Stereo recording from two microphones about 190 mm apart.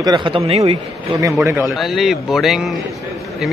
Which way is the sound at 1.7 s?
Centre (ahead or behind).